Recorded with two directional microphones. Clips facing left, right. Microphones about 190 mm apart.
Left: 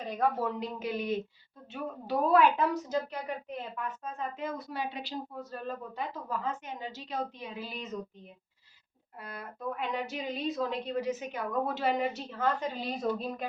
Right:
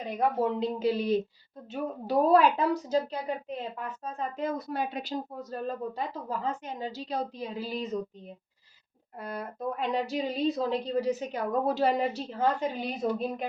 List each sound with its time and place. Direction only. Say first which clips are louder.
0.2 s a woman's voice: right 4 dB; 25° right (ahead or behind)
9.2 s a woman's voice: right 4 dB; 40° right (ahead or behind)
12.9 s a woman's voice: right 2 dB; 20° right (ahead or behind)